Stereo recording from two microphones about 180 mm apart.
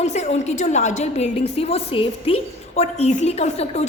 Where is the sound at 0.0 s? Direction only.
40° left (ahead or behind).